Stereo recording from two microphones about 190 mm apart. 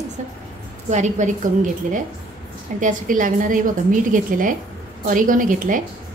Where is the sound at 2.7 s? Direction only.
45° right (ahead or behind).